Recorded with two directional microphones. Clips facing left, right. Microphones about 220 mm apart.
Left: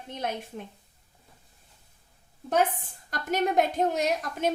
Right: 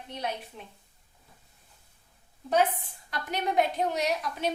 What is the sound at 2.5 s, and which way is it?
A woman's voice, 45° left (ahead or behind).